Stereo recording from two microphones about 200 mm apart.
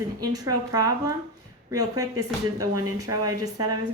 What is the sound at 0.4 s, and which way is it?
A woman's voice, 20° right (ahead or behind).